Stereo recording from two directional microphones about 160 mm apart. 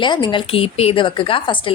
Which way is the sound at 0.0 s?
30° left (ahead or behind).